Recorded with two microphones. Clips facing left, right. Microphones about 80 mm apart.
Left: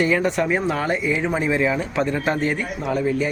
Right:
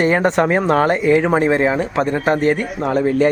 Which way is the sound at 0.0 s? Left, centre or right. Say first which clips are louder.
Right 5 dB; right.